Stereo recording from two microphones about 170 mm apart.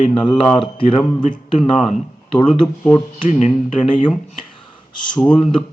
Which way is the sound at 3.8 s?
30° left (ahead or behind).